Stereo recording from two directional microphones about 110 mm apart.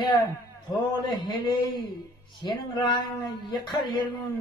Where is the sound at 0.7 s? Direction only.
45° left (ahead or behind).